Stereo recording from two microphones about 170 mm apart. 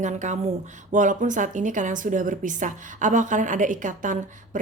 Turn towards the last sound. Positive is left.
turn(degrees=-50)  # may be behind; listen again after turning